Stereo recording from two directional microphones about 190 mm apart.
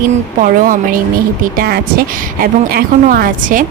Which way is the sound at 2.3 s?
50° right (ahead or behind).